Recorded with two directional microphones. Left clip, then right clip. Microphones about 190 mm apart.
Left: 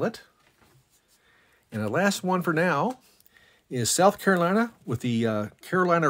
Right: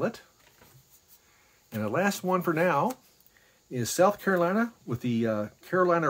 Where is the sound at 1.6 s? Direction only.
25° left (ahead or behind).